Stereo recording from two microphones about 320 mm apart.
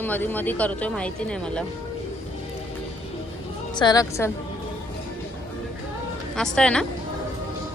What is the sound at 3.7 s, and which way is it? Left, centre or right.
Speech, centre.